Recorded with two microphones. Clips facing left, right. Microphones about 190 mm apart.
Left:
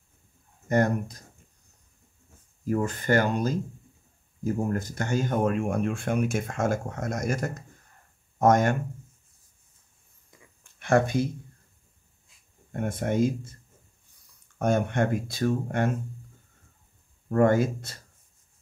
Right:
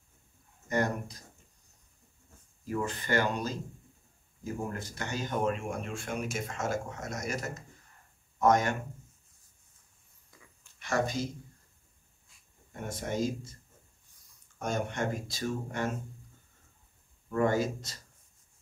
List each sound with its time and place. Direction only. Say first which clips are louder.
0.7 s speech: left 6 dB; 50° left (ahead or behind)
2.6 s speech: left 6 dB; 45° left (ahead or behind)
4.6 s speech: left 9 dB; 45° left (ahead or behind)
10.6 s a sound: left 8 dB; 55° left (ahead or behind)
12.7 s speech: left 7 dB; 55° left (ahead or behind)
14.6 s speech: left 8 dB; 55° left (ahead or behind)
17.3 s speech: left 6 dB; 55° left (ahead or behind)